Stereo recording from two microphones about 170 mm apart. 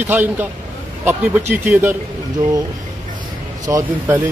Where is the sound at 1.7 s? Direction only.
10° right (ahead or behind).